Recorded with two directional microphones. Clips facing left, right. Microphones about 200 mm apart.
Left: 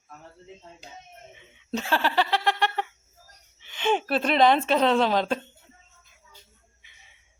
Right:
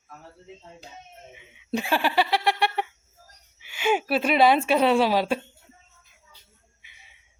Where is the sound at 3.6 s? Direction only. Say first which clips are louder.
Right 1 dB; 10° right (ahead or behind).